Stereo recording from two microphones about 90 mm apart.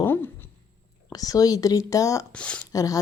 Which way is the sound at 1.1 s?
45° left (ahead or behind).